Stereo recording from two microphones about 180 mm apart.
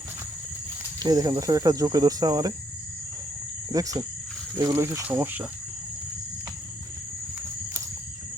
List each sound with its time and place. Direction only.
1.0 s speech: 20° right (ahead or behind)
3.7 s speech: 20° right (ahead or behind)